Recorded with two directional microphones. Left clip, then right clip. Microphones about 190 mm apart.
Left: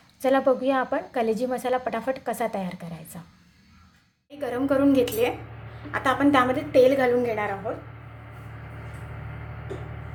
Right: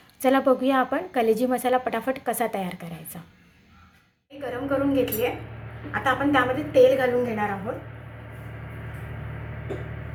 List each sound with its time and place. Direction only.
0.2 s a woman's voice: centre (ahead or behind)
4.4 s a woman's voice: 50° left (ahead or behind)